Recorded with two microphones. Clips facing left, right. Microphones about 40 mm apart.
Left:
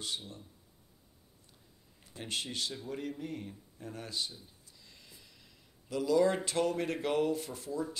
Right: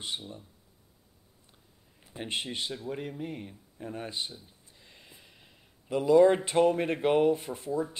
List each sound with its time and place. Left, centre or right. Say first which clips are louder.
2.0 s speech: right 4 dB; right